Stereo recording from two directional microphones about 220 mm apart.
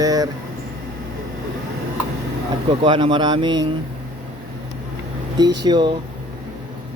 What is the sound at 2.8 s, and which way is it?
Speech, 20° right (ahead or behind).